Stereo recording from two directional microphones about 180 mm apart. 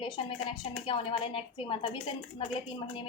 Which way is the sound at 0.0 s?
30° left (ahead or behind).